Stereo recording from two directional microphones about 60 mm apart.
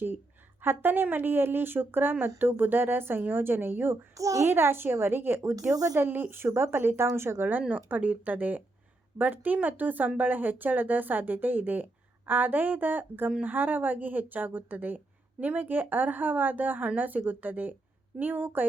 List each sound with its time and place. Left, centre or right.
0.6 s a woman's voice: right
4.1 s a child's voice: right
4.4 s a woman's voice: right
5.7 s speech: right
6.0 s a woman's voice: right
7.7 s a woman's voice: right